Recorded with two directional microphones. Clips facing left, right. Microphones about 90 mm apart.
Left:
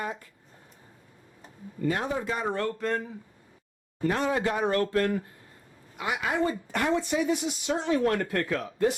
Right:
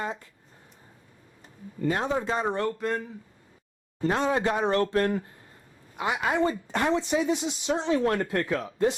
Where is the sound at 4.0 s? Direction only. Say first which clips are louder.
Right 1 dB; 25° right (ahead or behind).